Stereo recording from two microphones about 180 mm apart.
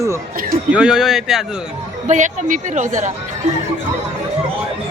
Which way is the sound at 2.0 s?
45° right (ahead or behind).